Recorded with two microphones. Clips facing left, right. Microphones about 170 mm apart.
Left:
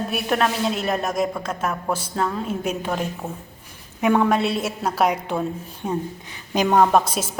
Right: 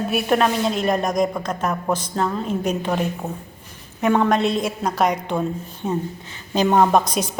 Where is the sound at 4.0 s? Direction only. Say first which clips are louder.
Right 1 dB; 5° left (ahead or behind).